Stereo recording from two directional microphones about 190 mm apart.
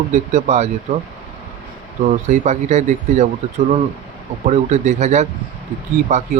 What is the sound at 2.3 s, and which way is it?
A man's voice, 35° right (ahead or behind).